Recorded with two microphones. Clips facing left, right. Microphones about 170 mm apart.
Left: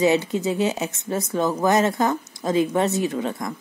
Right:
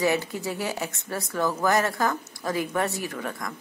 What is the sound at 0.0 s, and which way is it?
Speech, 20° left (ahead or behind).